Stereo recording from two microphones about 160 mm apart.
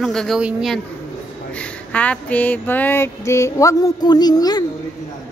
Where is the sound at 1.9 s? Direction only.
10° left (ahead or behind); by 4.7 s 25° left (ahead or behind).